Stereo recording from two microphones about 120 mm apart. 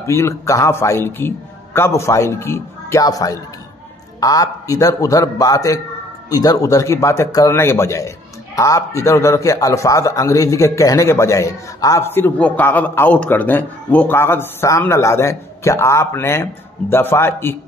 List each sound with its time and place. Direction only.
0.0 s a man's voice: 25° left (ahead or behind)